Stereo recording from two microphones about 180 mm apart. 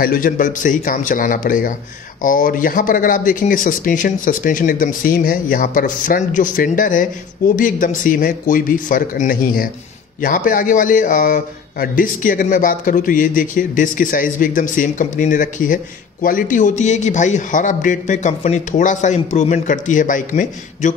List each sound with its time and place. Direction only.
0.0 s a man's voice: 55° left (ahead or behind)